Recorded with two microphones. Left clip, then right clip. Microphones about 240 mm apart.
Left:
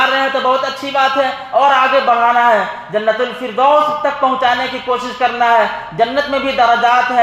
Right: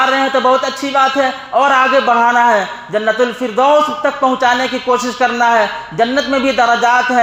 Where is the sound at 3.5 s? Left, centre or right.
Right.